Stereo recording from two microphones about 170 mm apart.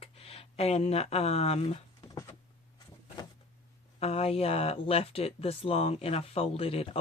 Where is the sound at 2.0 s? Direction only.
20° left (ahead or behind).